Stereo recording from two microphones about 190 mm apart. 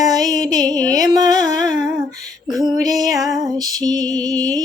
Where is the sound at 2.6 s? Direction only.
20° right (ahead or behind).